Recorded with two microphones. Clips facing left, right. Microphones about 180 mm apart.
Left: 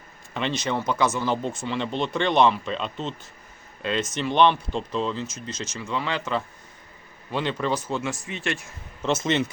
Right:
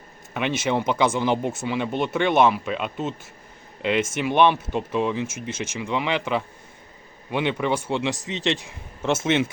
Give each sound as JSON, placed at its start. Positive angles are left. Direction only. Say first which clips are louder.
{"t": 0.3, "sound": "speech", "louder": "right 3 dB", "side_deg": -10}
{"t": 7.8, "sound": "speech", "louder": "right 3 dB", "side_deg": -25}
{"t": 9.0, "sound": "speech", "louder": "right 2 dB", "side_deg": -10}